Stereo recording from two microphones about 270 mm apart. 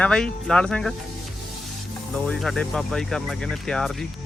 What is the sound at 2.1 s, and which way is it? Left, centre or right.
Speech, centre.